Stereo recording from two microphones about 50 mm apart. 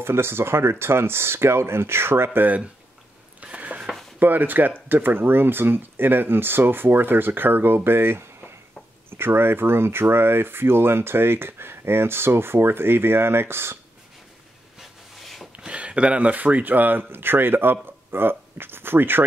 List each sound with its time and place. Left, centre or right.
0.0 s speech: right
2.4 s speech: right
3.3 s a sound: right
4.2 s speech: right
14.8 s a sound: centre
15.5 s speech: right